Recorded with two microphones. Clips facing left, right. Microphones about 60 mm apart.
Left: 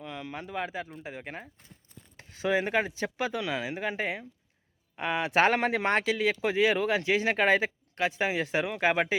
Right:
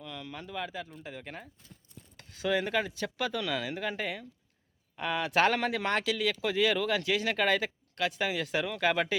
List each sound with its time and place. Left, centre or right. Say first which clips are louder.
0.0 s speech: left 4 dB; left